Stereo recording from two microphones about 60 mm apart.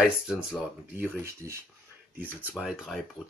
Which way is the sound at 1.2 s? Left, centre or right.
Right.